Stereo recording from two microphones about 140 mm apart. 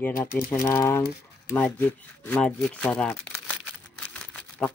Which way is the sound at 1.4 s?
10° left (ahead or behind).